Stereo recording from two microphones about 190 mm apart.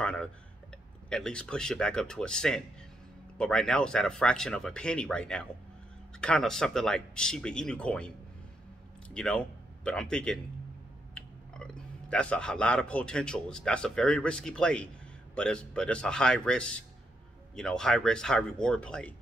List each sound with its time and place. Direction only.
0.0 s tick-tock: 5° left (ahead or behind)
1.1 s speech: 5° left (ahead or behind)
9.1 s speech: 5° left (ahead or behind)